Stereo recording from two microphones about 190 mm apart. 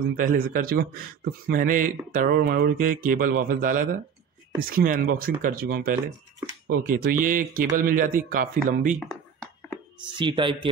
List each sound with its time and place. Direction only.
0.1 s speech: 50° right (ahead or behind)
10.1 s speech: 25° right (ahead or behind)